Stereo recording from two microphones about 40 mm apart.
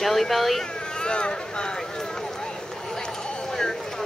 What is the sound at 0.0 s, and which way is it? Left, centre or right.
Speech, centre.